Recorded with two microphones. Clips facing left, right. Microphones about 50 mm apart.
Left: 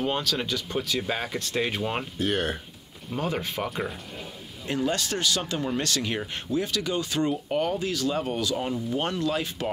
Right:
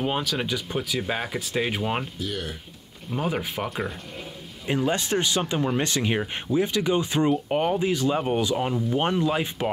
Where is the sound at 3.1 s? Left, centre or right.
Centre.